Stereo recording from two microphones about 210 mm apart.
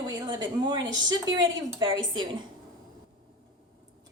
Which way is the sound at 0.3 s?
20° right (ahead or behind).